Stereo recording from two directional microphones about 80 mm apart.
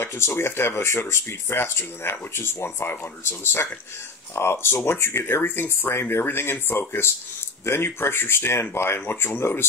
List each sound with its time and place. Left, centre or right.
0.0 s speech: left